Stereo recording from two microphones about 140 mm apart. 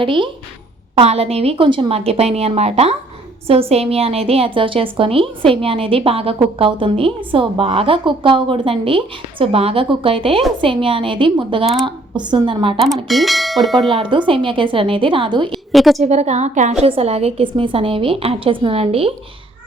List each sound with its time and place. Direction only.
0.0 s a woman's voice: 35° right (ahead or behind)
13.1 s speech: centre (ahead or behind)
13.9 s a woman's voice: 35° right (ahead or behind)
15.5 s a woman's voice: centre (ahead or behind)
16.0 s a woman's voice: 50° right (ahead or behind)